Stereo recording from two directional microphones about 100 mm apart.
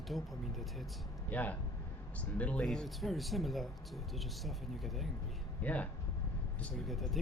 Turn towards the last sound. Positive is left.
turn(degrees=0)  # may be behind; listen again after turning